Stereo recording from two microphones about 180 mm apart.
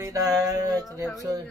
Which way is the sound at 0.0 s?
20° right (ahead or behind).